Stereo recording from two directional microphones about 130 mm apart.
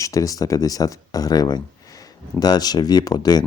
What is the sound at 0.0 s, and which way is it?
Speech, 25° left (ahead or behind).